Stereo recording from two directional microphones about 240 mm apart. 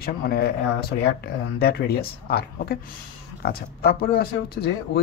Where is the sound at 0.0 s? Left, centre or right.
Left.